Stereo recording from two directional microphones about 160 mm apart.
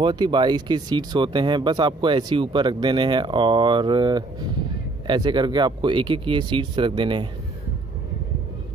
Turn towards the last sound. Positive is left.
turn(degrees=-30)  # may be behind; listen again after turning